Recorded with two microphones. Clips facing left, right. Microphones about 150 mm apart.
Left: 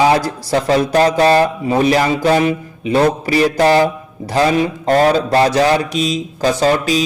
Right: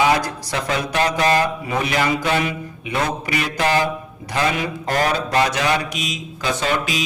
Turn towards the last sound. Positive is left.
turn(degrees=35)  # may be behind; listen again after turning